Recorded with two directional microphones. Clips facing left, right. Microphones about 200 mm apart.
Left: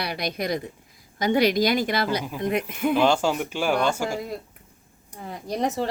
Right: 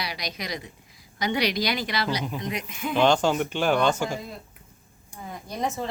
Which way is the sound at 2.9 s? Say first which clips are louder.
Right 1 dB; 5° left (ahead or behind).